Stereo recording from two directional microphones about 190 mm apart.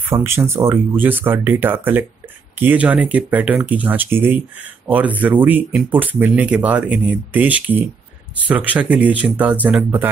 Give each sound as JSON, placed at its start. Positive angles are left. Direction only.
{"t": 0.0, "sound": "speech", "side_deg": -15}